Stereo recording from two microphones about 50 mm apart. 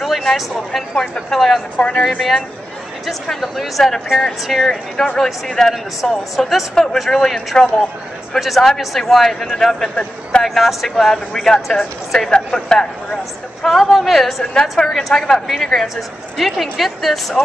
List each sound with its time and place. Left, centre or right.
0.0 s a sound: centre
1.3 s a man's voice: centre
1.8 s speech: centre
3.1 s a man's voice: centre
6.7 s speech: centre
8.4 s a man's voice: centre
12.3 s a man's voice: centre
13.6 s a man's voice: centre